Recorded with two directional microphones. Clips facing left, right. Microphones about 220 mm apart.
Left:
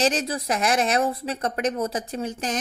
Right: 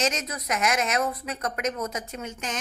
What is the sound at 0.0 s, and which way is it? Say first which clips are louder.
Speech: left 5 dB; 35° left (ahead or behind).